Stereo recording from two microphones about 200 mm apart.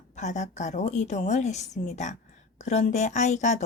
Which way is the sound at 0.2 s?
35° left (ahead or behind).